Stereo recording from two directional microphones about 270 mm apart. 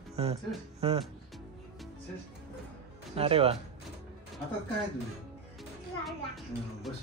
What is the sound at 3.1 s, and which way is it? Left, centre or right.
Speech, right.